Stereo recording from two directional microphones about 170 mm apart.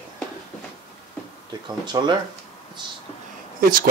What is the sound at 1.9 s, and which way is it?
Speech, 25° right (ahead or behind).